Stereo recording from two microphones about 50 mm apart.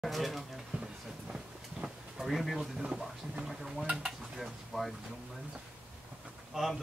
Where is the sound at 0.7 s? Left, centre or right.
Centre.